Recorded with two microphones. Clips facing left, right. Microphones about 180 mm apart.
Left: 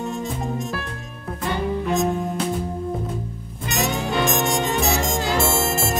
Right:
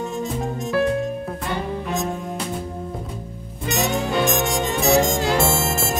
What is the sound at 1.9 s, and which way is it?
Music, centre (ahead or behind).